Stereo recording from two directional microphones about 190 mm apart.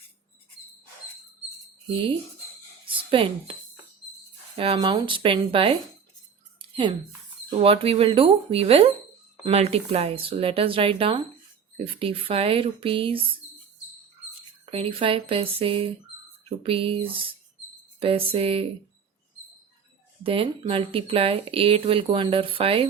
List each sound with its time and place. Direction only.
1.9 s speech: 25° right (ahead or behind)
2.8 s a sound: 30° right (ahead or behind)
4.5 s speech: 30° right (ahead or behind)
6.6 s a sound: 25° right (ahead or behind)
7.5 s speech: 30° right (ahead or behind)
14.7 s speech: 30° right (ahead or behind)
20.2 s speech: 30° right (ahead or behind)